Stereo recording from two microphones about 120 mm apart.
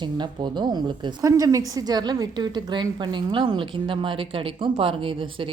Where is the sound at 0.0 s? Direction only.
40° right (ahead or behind).